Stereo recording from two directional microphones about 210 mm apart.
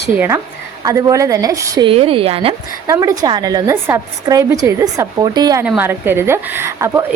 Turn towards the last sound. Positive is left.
turn(degrees=-10)  # may be behind; listen again after turning